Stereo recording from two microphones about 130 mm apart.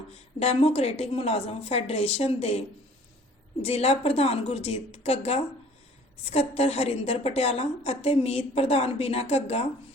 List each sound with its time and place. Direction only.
0.3 s a woman's voice: 50° left (ahead or behind)